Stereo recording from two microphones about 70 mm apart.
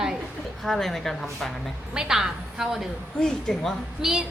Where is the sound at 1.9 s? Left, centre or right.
Centre.